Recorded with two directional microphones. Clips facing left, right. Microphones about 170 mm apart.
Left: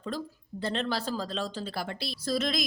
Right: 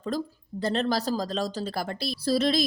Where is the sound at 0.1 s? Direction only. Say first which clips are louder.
Right 5 dB; 45° right (ahead or behind).